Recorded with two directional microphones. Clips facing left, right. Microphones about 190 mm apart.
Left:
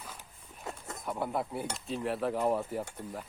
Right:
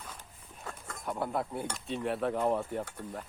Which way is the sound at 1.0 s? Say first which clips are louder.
Even; centre (ahead or behind).